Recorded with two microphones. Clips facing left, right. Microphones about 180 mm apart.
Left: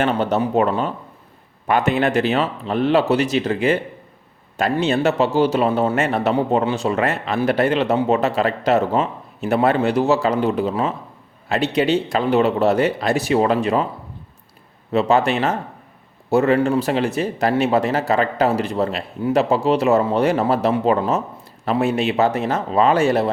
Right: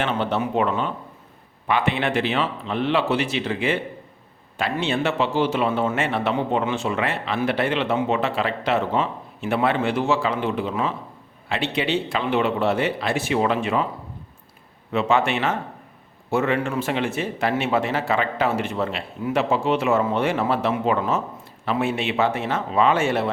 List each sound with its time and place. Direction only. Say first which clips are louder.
0.0 s speech: left 5 dB; 40° left (ahead or behind)
14.9 s speech: left 4 dB; 35° left (ahead or behind)